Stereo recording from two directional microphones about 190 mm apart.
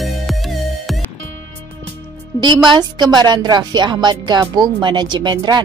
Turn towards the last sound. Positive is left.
turn(degrees=-20)  # may be behind; listen again after turning